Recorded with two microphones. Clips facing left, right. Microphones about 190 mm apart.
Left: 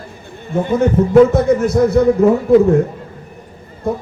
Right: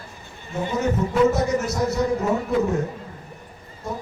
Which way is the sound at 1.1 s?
55° left (ahead or behind).